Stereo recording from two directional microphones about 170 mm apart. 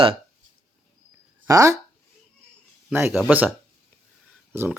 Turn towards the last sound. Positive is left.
turn(degrees=-15)  # may be behind; listen again after turning